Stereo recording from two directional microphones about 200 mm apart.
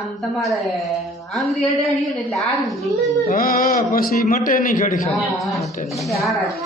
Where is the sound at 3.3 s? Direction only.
45° left (ahead or behind).